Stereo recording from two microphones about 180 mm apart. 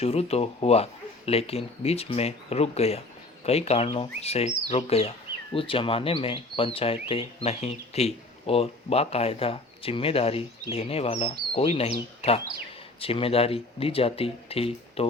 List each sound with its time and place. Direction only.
0.0 s speech: 35° left (ahead or behind)